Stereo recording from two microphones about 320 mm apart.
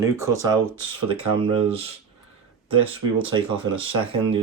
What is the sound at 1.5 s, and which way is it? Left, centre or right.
Speech, centre.